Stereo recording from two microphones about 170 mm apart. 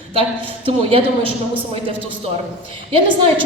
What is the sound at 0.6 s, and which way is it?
Speech, 35° right (ahead or behind).